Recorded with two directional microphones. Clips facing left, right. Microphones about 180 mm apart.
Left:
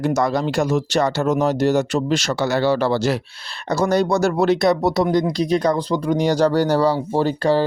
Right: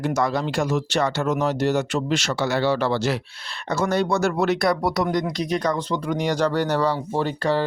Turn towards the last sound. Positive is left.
turn(degrees=35)  # may be behind; listen again after turning